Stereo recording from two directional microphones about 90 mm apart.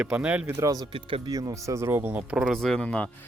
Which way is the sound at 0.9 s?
85° right.